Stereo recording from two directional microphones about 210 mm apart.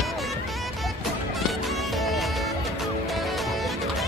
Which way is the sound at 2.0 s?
Centre (ahead or behind).